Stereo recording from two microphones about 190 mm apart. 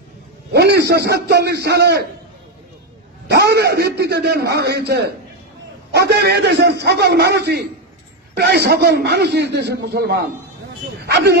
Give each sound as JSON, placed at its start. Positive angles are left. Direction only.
{"t": 0.5, "sound": "a man's voice", "side_deg": -60}
{"t": 3.3, "sound": "a man's voice", "side_deg": -60}